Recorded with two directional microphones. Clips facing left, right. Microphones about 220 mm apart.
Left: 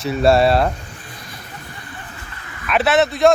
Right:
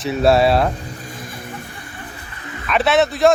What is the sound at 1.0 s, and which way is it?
Vehicle, 50° right (ahead or behind).